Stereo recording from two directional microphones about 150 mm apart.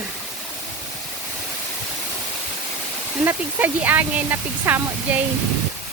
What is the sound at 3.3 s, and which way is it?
Speech, 10° right (ahead or behind).